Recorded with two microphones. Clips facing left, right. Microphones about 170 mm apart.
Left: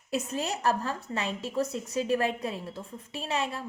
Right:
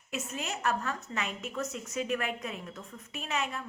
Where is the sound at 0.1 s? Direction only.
35° left (ahead or behind).